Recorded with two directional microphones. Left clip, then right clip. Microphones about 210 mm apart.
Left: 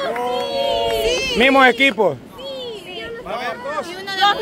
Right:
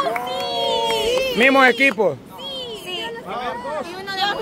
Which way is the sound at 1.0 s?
50° left (ahead or behind).